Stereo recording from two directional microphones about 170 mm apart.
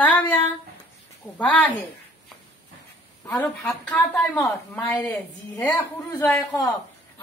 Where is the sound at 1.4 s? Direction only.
5° left (ahead or behind).